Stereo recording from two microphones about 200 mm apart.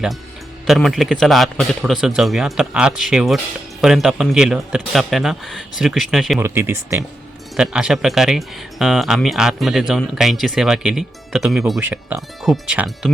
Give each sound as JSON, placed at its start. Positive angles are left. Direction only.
{"t": 0.7, "sound": "speech", "side_deg": 0}
{"t": 6.4, "sound": "speech", "side_deg": -10}